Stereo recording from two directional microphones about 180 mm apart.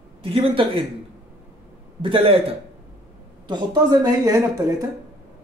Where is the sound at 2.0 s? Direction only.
30° right (ahead or behind).